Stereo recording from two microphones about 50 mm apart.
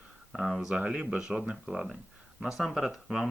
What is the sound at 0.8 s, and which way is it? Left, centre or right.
Speech, centre.